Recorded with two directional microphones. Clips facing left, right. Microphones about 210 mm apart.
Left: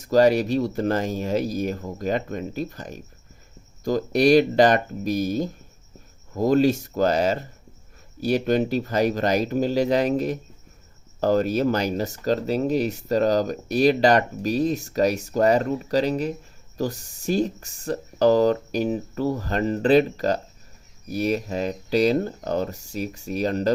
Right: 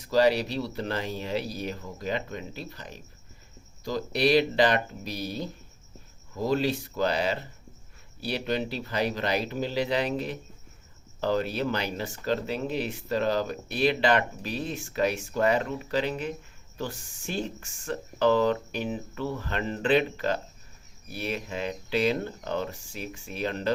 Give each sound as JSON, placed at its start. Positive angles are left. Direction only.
{"t": 0.0, "sound": "speech", "side_deg": 45}